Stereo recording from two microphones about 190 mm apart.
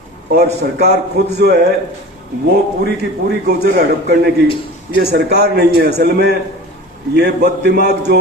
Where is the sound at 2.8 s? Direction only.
60° right (ahead or behind).